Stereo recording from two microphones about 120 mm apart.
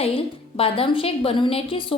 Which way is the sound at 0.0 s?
50° left (ahead or behind).